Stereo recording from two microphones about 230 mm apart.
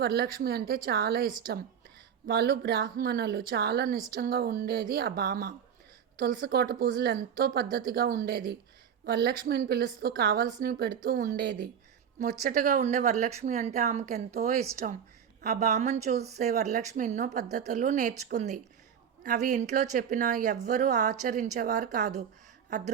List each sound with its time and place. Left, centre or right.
0.0 s a woman's voice: right